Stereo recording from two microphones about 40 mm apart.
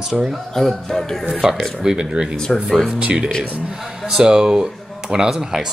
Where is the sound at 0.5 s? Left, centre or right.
Centre.